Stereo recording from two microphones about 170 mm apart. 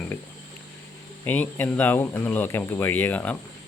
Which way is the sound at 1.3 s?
10° left (ahead or behind).